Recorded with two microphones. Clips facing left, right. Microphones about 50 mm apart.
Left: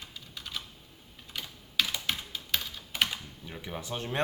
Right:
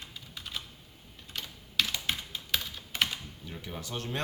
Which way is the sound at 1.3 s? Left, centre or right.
Centre.